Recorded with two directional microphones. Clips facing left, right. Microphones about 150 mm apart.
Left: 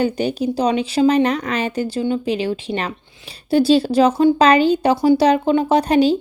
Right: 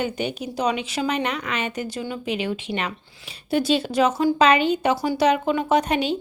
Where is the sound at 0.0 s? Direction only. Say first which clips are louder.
Left 7 dB; 35° left (ahead or behind).